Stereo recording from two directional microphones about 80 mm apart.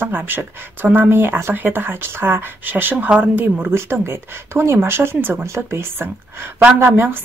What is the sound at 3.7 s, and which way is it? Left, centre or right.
Speech, right.